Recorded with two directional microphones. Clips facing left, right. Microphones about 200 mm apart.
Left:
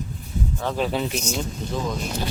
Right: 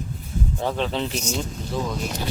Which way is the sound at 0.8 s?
10° left (ahead or behind).